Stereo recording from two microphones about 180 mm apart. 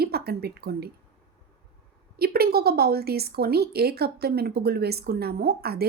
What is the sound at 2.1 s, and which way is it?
Speech, 60° right (ahead or behind).